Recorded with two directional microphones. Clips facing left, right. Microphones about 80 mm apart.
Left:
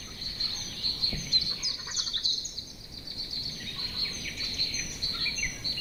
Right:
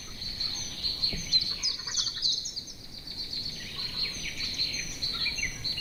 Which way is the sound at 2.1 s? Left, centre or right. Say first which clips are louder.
Left 1 dB; centre.